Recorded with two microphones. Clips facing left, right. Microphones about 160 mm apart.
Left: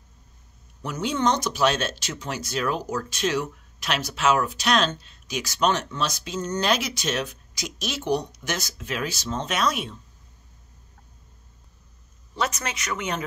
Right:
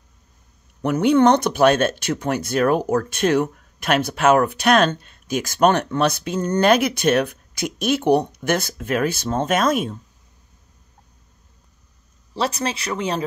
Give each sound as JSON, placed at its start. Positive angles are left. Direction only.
{"t": 0.8, "sound": "speech", "side_deg": -60}
{"t": 12.4, "sound": "speech", "side_deg": -30}